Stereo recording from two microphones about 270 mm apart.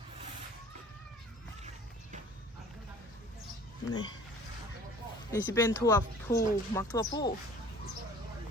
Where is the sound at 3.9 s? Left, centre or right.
Centre.